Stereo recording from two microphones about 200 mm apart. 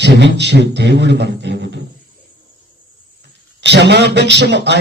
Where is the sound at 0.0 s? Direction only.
60° right (ahead or behind).